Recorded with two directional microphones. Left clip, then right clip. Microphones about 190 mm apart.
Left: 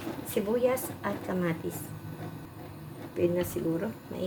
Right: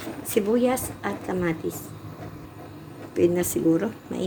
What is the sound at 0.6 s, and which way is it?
Speech, 30° right (ahead or behind).